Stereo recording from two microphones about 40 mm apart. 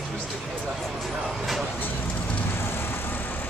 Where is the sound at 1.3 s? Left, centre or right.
Centre.